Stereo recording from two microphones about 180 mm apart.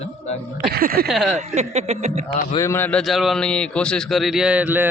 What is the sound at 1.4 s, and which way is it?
Speech, 40° right (ahead or behind).